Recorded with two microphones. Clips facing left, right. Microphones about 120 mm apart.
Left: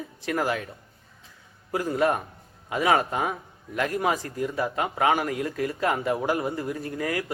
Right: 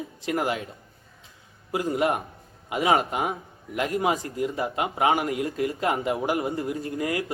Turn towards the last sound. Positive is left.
turn(degrees=-20)  # may be behind; listen again after turning